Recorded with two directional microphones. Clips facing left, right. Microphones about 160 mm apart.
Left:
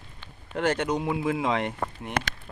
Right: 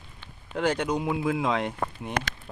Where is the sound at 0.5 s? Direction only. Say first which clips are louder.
Even; 10° right (ahead or behind).